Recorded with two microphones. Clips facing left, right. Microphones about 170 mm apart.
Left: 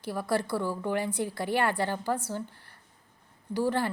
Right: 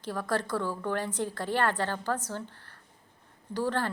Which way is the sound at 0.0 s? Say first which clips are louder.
Left 2 dB; 10° left (ahead or behind).